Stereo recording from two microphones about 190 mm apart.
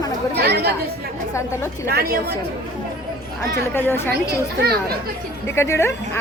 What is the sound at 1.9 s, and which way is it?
Speech, 55° right (ahead or behind).